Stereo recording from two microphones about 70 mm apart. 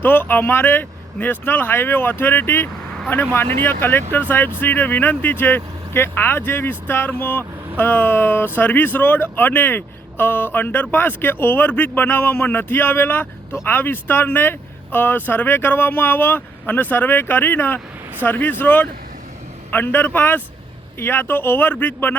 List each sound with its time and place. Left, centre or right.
0.0 s speech: left